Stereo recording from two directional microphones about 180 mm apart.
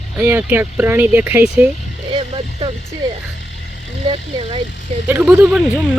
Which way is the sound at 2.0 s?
30° right (ahead or behind).